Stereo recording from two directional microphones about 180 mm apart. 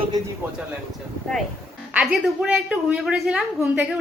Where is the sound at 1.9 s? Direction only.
5° right (ahead or behind).